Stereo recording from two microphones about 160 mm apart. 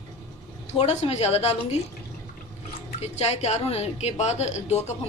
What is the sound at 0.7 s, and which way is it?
A woman's voice, 45° left (ahead or behind).